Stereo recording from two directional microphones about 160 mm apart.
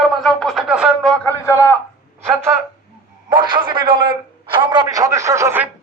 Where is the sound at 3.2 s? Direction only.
30° right (ahead or behind); by 5.7 s 15° right (ahead or behind).